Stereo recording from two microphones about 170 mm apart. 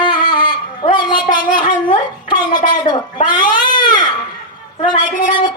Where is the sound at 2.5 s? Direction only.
25° left (ahead or behind).